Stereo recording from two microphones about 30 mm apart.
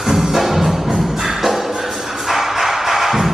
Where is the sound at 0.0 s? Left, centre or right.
Centre.